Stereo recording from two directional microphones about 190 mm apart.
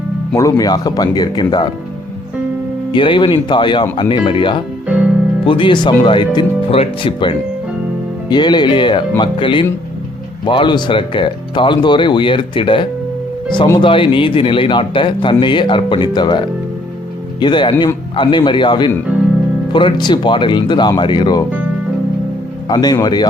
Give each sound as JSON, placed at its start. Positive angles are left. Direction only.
{"t": 0.3, "sound": "a man's voice", "side_deg": 20}
{"t": 2.9, "sound": "a man's voice", "side_deg": 25}
{"t": 17.4, "sound": "a man's voice", "side_deg": 25}
{"t": 22.7, "sound": "a man's voice", "side_deg": 20}